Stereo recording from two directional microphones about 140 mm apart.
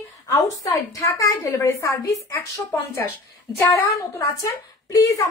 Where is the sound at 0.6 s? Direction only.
25° left (ahead or behind).